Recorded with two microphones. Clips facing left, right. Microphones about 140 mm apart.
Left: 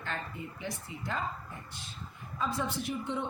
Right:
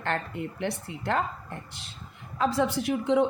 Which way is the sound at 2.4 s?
85° right.